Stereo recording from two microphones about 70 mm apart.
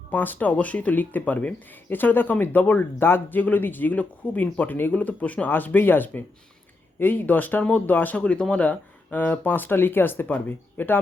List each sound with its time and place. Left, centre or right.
0.1 s speech: left